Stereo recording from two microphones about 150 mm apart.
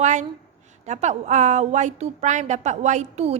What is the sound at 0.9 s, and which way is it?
A woman's voice, 50° right (ahead or behind).